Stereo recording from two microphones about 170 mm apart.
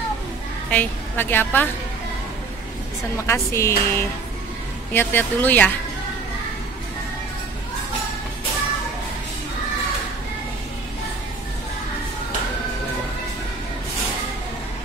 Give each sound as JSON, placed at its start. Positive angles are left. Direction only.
{"t": 0.7, "sound": "a woman's voice", "side_deg": 10}
{"t": 3.3, "sound": "a woman's voice", "side_deg": 15}